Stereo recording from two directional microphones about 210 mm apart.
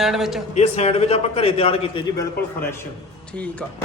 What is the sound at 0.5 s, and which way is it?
A man's voice, 30° left (ahead or behind).